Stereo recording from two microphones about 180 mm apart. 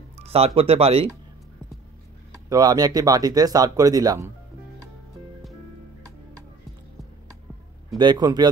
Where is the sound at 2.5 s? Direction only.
20° right (ahead or behind).